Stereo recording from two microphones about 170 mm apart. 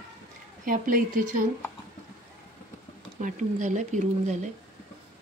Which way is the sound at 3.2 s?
50° right (ahead or behind).